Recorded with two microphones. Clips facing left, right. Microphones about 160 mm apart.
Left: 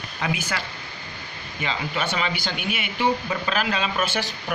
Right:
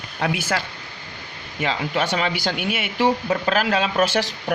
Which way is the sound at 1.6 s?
75° right (ahead or behind).